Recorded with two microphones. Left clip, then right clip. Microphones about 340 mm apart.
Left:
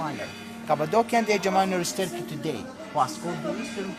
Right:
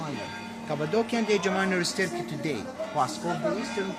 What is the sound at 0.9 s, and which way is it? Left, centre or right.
Speech, centre.